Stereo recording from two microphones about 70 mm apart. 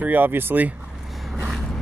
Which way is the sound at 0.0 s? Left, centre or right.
Right.